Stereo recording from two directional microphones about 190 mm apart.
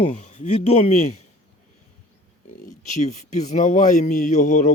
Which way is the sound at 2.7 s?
40° left (ahead or behind).